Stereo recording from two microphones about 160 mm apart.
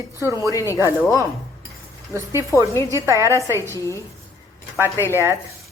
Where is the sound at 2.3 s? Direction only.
20° left (ahead or behind).